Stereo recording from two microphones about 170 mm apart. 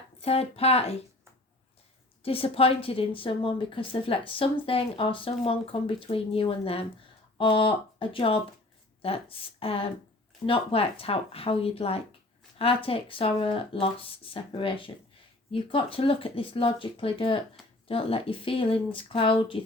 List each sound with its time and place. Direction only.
0.2 s a woman's voice: 35° left (ahead or behind)
2.2 s a woman's voice: 35° left (ahead or behind)